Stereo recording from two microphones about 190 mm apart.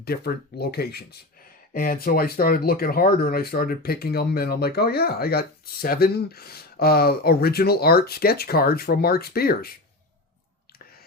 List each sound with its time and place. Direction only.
0.0 s speech: 55° left (ahead or behind)